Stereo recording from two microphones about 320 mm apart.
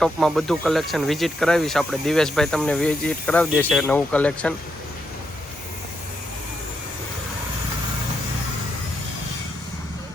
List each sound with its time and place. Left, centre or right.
0.0 s speech: centre